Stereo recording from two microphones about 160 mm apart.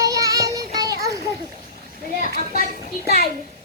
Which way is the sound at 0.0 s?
25° right (ahead or behind).